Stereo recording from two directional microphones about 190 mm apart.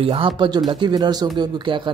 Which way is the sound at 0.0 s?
30° right (ahead or behind).